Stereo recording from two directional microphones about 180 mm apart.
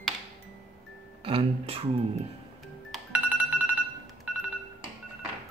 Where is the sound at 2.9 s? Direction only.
5° right (ahead or behind).